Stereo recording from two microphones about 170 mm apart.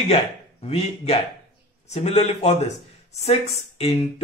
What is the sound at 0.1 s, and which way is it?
Speech, 35° left (ahead or behind).